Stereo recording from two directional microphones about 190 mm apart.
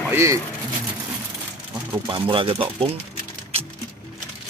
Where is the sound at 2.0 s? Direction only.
25° right (ahead or behind).